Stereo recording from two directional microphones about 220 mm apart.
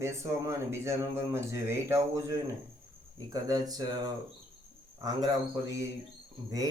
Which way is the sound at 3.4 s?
15° right (ahead or behind).